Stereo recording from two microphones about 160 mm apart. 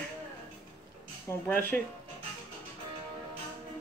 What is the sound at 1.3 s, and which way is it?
Speech, 10° left (ahead or behind).